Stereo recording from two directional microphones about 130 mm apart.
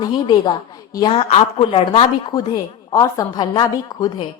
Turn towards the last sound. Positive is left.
turn(degrees=30)  # may be behind; listen again after turning